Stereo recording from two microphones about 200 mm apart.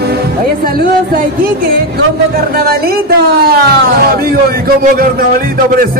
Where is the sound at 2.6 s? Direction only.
50° right (ahead or behind).